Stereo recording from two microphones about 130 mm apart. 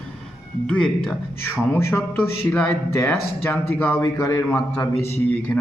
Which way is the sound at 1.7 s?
20° left (ahead or behind).